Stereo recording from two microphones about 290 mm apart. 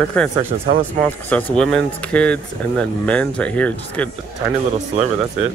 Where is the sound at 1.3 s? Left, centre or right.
Centre.